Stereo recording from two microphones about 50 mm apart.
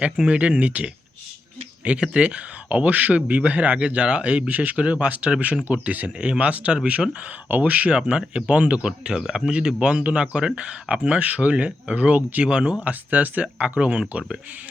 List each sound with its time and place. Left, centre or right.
0.0 s speech: right
6.1 s speech: right